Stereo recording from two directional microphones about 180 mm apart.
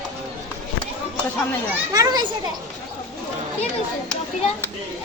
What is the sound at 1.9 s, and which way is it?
Speech, 20° right (ahead or behind).